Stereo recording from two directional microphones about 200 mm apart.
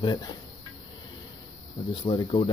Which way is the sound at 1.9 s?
20° left (ahead or behind).